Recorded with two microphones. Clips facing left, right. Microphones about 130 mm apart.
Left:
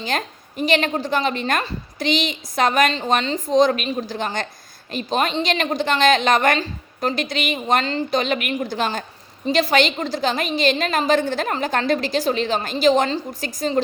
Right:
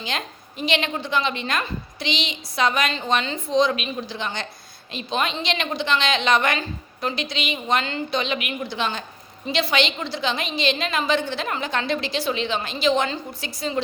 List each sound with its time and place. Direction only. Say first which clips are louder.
0.0 s a woman's voice: left 5 dB; 45° left (ahead or behind)
3.0 s a woman's voice: left 3 dB; 35° left (ahead or behind)